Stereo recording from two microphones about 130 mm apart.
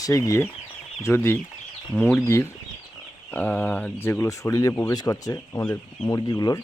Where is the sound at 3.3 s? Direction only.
10° left (ahead or behind); by 6.6 s 30° left (ahead or behind).